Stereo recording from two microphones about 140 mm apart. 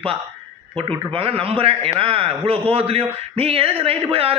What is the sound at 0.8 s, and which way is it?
A man's voice, 40° right (ahead or behind).